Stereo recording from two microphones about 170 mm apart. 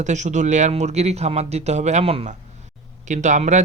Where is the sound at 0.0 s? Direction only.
45° right (ahead or behind).